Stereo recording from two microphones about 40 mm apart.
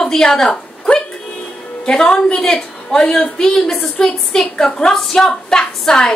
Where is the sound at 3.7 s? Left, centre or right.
Left.